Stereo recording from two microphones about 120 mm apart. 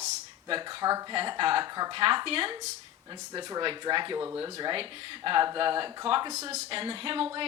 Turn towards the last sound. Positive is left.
turn(degrees=-50)  # may be behind; listen again after turning